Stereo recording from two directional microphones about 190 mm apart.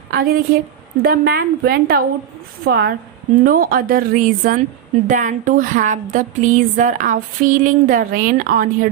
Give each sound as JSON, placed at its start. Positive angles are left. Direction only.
{"t": 0.1, "sound": "a woman's voice", "side_deg": -55}
{"t": 3.4, "sound": "speech", "side_deg": -50}